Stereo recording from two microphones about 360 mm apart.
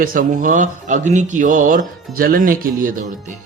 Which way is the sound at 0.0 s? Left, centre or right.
Right.